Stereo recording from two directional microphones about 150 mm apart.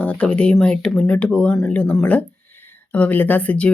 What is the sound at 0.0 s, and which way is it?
Speech, 10° left (ahead or behind).